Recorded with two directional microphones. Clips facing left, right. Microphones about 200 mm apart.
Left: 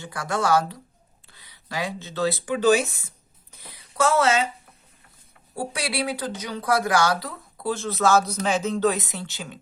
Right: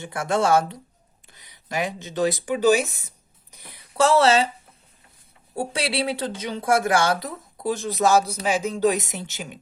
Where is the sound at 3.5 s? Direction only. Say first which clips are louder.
Even; 15° right (ahead or behind).